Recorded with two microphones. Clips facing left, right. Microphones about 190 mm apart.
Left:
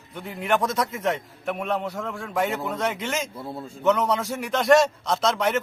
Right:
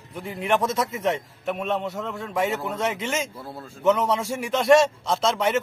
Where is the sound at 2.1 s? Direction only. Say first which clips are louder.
Even; 5° right (ahead or behind).